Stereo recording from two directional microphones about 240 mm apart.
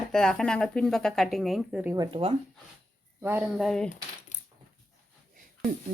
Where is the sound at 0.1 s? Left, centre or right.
Centre.